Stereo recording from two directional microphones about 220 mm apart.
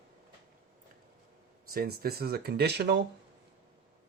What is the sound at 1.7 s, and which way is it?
Speech, 45° right (ahead or behind).